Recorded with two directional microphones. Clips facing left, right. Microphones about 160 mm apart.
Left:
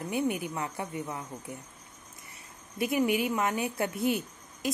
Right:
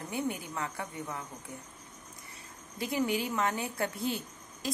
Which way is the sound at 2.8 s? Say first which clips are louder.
Left 4 dB; 20° left (ahead or behind).